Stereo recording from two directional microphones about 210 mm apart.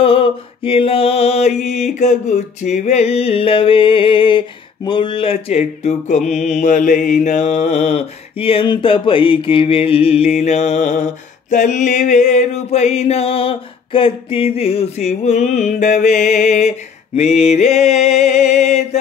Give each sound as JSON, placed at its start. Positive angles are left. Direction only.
{"t": 0.0, "sound": "mantra", "side_deg": 25}